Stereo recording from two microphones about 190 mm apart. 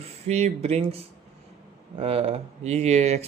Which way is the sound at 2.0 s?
30° right (ahead or behind).